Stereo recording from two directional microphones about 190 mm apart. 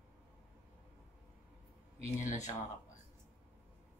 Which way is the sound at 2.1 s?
40° left (ahead or behind).